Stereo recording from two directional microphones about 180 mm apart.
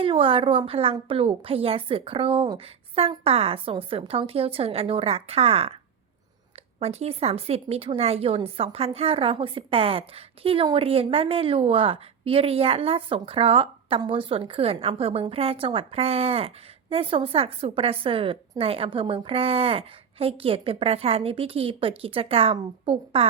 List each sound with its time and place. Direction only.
0.0 s speech: 30° right (ahead or behind)
6.7 s speech: 35° right (ahead or behind)